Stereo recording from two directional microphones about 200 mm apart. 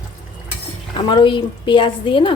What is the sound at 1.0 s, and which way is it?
Speech, 20° left (ahead or behind).